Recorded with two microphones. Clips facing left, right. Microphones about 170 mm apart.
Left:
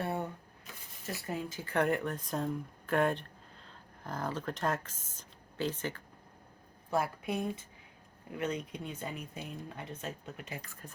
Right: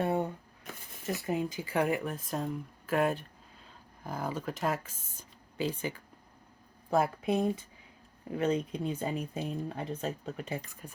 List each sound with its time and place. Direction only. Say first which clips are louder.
0.0 s shuffling cards: right 5 dB; 20° right (ahead or behind)
1.3 s speech: right 4 dB; 15° right (ahead or behind)
6.9 s speech: right 5 dB; 25° right (ahead or behind)
10.6 s speech: right 2 dB; 15° right (ahead or behind)